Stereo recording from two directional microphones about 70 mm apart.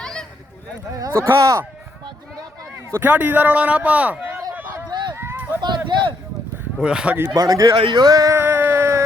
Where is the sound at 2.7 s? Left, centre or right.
Right.